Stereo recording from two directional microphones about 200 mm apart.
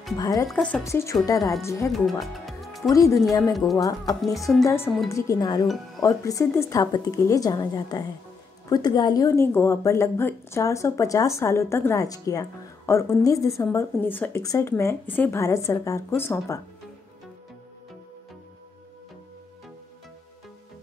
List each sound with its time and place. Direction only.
0.2 s a woman's voice: 20° left (ahead or behind)
0.5 s a woman's voice: 5° left (ahead or behind)
1.9 s music: centre (ahead or behind)
2.9 s a woman's voice: 15° left (ahead or behind)